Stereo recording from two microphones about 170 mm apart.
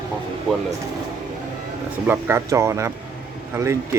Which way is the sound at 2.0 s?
15° right (ahead or behind).